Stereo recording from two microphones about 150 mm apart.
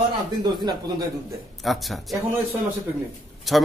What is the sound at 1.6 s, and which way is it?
Speech, centre (ahead or behind).